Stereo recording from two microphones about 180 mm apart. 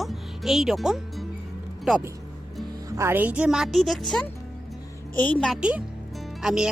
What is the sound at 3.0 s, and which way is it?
A woman's voice, 10° right (ahead or behind).